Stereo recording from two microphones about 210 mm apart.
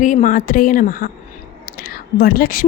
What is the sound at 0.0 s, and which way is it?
A woman's voice, 35° left (ahead or behind).